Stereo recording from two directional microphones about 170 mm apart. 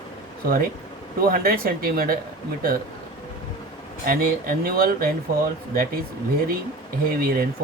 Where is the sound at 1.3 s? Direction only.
60° right (ahead or behind).